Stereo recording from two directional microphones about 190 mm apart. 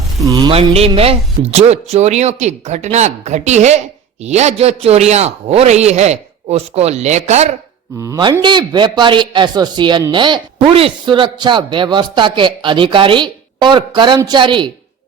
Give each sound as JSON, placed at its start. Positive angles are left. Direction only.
{"t": 0.3, "sound": "speech", "side_deg": -25}
{"t": 7.9, "sound": "a man's voice", "side_deg": -15}